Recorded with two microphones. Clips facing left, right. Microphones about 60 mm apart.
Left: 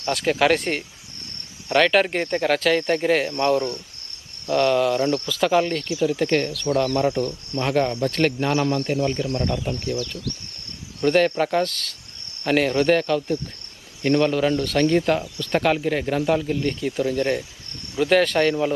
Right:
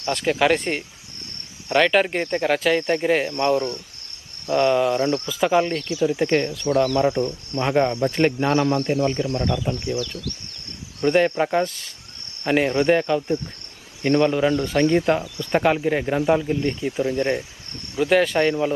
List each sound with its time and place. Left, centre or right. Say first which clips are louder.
0.3 s speech: even; centre
3.3 s speech: even; right
9.9 s speech: right 1 dB; left
11.0 s speech: even; right
18.0 s speech: even; centre